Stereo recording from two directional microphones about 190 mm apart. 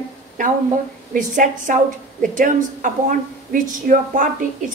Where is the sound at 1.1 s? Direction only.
40° right (ahead or behind).